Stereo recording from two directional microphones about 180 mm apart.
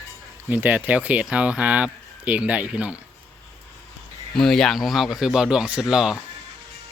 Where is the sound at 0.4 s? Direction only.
10° right (ahead or behind).